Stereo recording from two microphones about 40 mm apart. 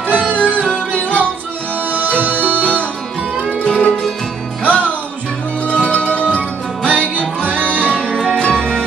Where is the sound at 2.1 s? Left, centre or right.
Right.